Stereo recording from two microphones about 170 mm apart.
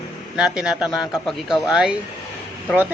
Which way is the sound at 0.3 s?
5° right (ahead or behind).